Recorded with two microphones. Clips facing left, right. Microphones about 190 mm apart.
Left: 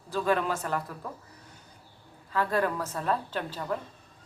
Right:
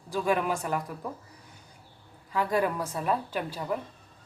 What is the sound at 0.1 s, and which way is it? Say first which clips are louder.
Speech: even; 15° right (ahead or behind).